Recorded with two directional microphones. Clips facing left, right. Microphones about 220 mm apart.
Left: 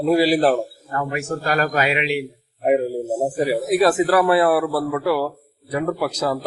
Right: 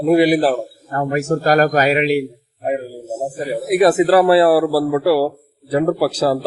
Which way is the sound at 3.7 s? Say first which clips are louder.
Right 6 dB; 20° right (ahead or behind).